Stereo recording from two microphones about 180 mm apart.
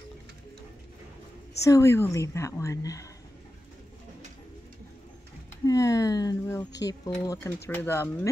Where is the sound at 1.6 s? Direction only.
15° left (ahead or behind).